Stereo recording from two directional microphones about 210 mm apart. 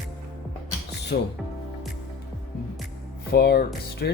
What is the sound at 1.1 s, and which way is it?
Speech, 55° left (ahead or behind).